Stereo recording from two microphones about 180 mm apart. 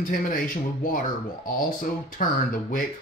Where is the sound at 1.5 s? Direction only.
50° left (ahead or behind).